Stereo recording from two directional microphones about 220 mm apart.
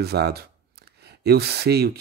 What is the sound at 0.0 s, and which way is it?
Speech, 45° right (ahead or behind).